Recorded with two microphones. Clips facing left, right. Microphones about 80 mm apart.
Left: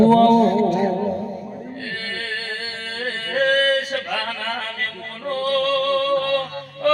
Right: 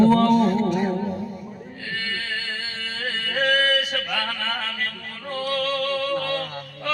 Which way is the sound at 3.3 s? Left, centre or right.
Left.